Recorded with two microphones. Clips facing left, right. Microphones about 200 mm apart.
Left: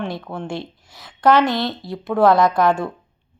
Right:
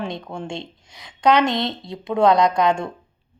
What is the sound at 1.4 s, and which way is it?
Speech, 20° right (ahead or behind).